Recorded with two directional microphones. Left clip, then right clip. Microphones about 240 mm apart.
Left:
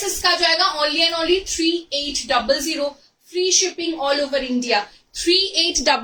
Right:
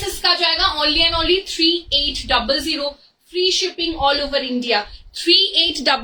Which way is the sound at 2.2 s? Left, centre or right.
Centre.